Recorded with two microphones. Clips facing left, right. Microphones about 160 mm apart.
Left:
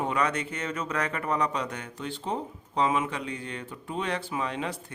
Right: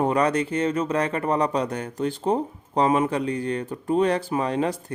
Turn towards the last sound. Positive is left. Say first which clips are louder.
# right 8 dB
turn(degrees=-40)  # may be behind; listen again after turning